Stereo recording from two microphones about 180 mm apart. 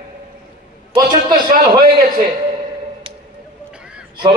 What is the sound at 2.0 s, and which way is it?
Speech, 50° right (ahead or behind).